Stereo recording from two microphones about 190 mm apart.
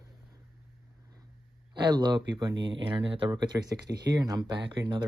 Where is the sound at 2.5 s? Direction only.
70° right (ahead or behind).